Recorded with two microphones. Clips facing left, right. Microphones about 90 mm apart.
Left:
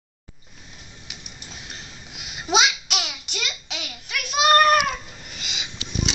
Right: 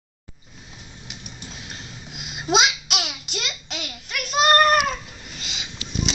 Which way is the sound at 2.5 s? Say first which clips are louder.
Right 1 dB; centre (ahead or behind).